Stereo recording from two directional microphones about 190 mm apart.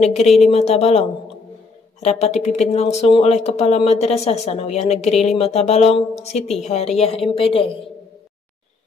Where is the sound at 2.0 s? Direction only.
35° left (ahead or behind).